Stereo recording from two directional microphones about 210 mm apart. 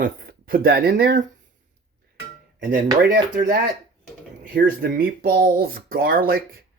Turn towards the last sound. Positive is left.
turn(degrees=-45)  # may be behind; listen again after turning